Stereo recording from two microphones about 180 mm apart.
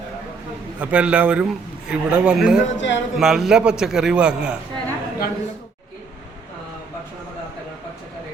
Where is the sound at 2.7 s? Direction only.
90° left.